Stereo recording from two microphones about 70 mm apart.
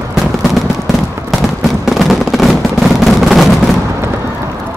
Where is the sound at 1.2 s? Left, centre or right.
Centre.